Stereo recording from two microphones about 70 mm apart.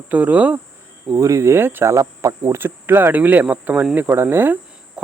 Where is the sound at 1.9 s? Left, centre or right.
Right.